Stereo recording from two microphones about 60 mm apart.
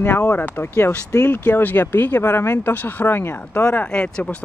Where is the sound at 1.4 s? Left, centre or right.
Left.